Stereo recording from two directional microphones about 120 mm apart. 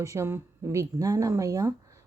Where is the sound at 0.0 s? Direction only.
25° right (ahead or behind).